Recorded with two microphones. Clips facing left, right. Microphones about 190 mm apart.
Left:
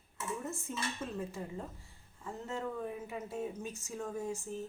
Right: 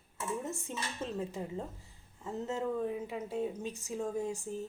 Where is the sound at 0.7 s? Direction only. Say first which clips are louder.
Right 1 dB; 20° right (ahead or behind).